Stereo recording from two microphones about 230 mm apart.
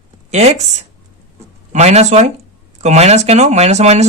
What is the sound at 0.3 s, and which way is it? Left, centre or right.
Speech, right.